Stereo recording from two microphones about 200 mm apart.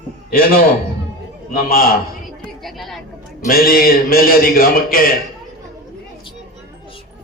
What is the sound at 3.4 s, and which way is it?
A man's voice, 45° left (ahead or behind).